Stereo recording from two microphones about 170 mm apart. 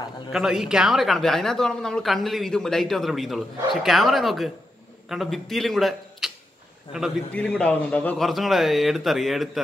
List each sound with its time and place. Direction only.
0.3 s speech: centre (ahead or behind)
7.3 s speech: 5° left (ahead or behind)